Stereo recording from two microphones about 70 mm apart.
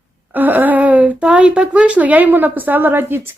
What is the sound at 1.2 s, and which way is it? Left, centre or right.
A woman's voice, centre.